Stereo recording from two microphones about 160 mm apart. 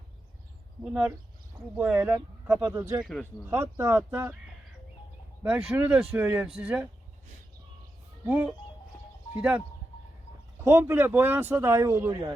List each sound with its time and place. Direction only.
0.9 s speech: 10° right (ahead or behind)
3.0 s speech: centre (ahead or behind)
3.5 s speech: 15° right (ahead or behind)
5.4 s speech: 5° right (ahead or behind)
8.3 s speech: 10° right (ahead or behind)